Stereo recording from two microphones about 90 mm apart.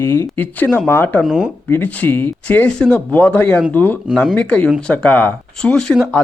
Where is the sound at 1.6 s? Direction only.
20° left (ahead or behind).